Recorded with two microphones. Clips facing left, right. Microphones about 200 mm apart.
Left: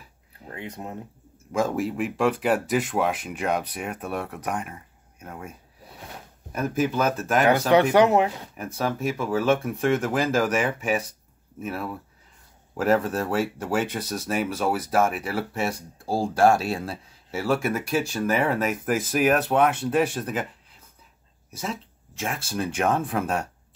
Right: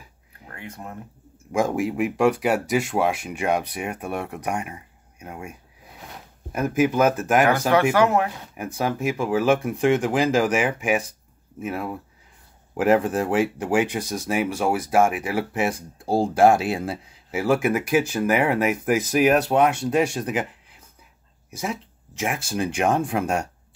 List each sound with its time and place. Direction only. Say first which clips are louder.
0.5 s speech: left 2 dB; 20° left (ahead or behind)
1.5 s speech: right 2 dB; 15° right (ahead or behind)
7.4 s speech: left 5 dB; 20° left (ahead or behind)
8.5 s speech: right 3 dB; 15° right (ahead or behind)
21.5 s speech: right 3 dB; 15° right (ahead or behind)